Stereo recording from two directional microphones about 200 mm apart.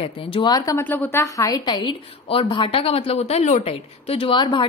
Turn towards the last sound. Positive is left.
turn(degrees=25)  # may be behind; listen again after turning